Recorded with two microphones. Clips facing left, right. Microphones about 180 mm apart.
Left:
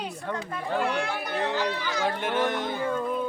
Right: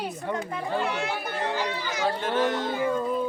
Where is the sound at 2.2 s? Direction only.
15° left (ahead or behind).